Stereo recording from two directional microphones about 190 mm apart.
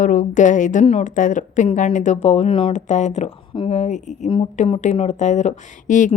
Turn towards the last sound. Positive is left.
turn(degrees=40)  # may be behind; listen again after turning